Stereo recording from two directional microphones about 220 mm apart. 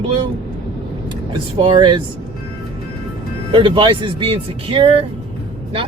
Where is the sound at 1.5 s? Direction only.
20° right (ahead or behind).